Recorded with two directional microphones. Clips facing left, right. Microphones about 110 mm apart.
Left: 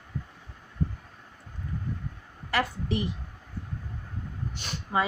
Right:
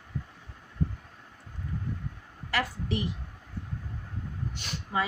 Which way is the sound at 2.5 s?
25° left (ahead or behind).